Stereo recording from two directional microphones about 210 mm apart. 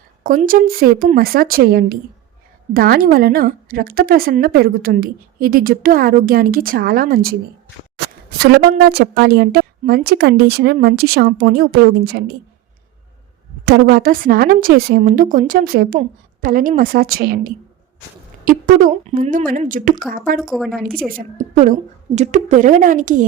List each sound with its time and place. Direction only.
0.2 s a woman's voice: 40° right (ahead or behind)
13.7 s a woman's voice: 45° right (ahead or behind)
20.5 s a woman's voice: centre (ahead or behind)
21.1 s a woman's voice: 40° right (ahead or behind)